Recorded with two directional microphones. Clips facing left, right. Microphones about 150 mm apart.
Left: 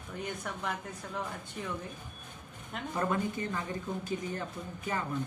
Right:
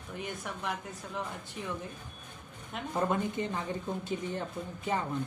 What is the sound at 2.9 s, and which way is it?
Speech, 25° right (ahead or behind).